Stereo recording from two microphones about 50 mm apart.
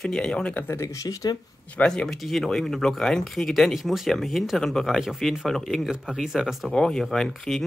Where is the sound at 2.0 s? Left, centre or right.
Centre.